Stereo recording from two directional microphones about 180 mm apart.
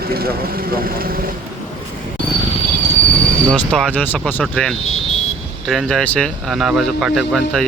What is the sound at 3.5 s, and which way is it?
Speech, 5° left (ahead or behind).